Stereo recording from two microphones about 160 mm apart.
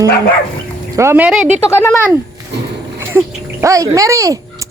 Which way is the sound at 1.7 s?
15° left (ahead or behind).